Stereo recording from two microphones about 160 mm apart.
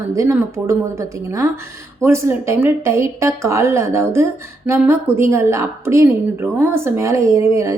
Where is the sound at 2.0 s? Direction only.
15° right (ahead or behind).